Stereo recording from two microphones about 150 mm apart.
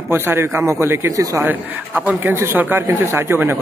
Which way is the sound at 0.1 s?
15° right (ahead or behind).